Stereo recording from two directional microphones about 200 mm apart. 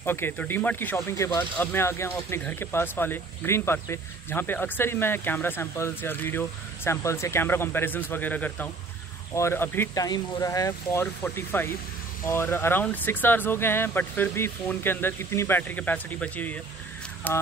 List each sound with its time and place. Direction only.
0.0 s speech: 10° left (ahead or behind)